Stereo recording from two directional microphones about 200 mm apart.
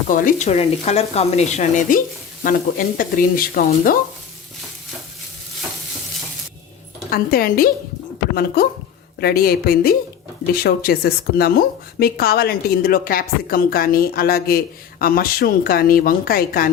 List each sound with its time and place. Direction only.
0.1 s speech: 40° left (ahead or behind)
7.1 s speech: 45° left (ahead or behind)
9.2 s speech: 50° left (ahead or behind)